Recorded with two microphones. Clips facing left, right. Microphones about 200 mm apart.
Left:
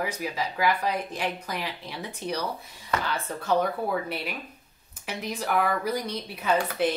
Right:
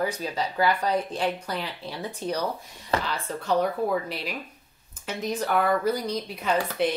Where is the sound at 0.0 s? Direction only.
10° left (ahead or behind).